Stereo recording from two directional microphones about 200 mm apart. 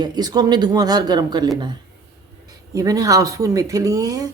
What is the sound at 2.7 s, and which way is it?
Speech, 15° right (ahead or behind).